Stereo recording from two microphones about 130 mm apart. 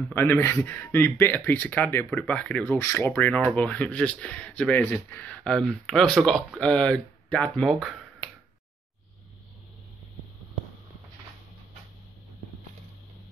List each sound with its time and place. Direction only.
0.1 s speech: 15° left (ahead or behind)